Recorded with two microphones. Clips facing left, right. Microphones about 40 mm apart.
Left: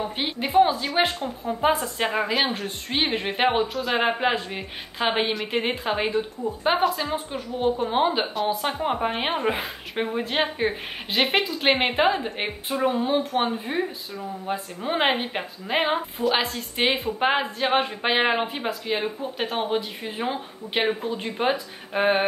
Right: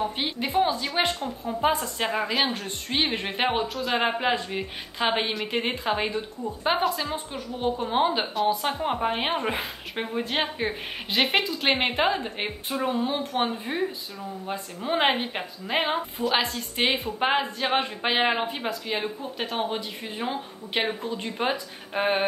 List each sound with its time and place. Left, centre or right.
0.0 s a woman's voice: centre